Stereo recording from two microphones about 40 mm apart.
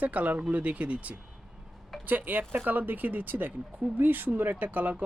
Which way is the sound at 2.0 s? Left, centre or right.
Right.